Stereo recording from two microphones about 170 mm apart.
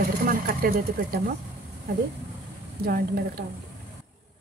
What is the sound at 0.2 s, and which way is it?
Speech, 60° right (ahead or behind).